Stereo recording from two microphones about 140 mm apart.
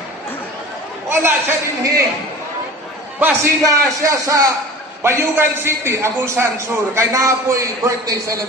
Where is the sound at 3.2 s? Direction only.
20° right (ahead or behind).